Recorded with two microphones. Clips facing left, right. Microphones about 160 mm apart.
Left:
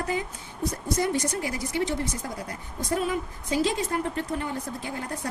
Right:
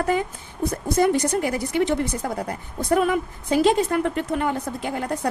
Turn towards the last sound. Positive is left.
turn(degrees=-70)  # may be behind; listen again after turning